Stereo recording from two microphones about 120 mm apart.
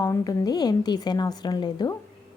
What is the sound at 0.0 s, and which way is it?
A woman's voice, 30° left (ahead or behind).